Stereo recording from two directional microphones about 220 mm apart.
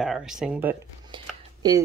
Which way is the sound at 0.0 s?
Centre (ahead or behind).